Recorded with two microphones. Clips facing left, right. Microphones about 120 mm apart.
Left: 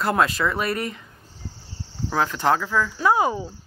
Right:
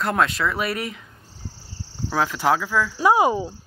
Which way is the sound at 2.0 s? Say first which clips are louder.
Even; centre (ahead or behind).